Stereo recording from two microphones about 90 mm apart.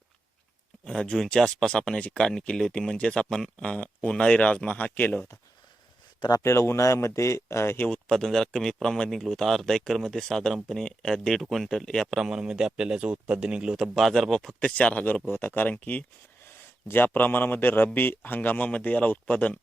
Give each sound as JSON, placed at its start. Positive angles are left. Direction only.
{"t": 0.9, "sound": "speech", "side_deg": 10}
{"t": 6.4, "sound": "speech", "side_deg": 30}
{"t": 7.9, "sound": "a man's voice", "side_deg": 10}